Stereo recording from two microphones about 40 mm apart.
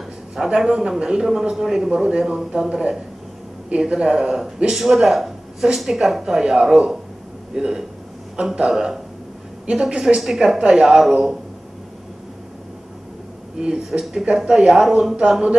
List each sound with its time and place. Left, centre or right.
0.6 s speech: centre
13.6 s speech: centre